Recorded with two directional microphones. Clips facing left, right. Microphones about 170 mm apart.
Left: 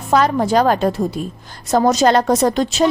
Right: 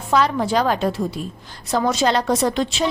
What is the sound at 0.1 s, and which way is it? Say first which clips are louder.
A woman's voice: left 4 dB; 45° left (ahead or behind).